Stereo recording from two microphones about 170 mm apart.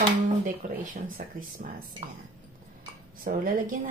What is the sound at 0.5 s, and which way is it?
Speech, 55° right (ahead or behind).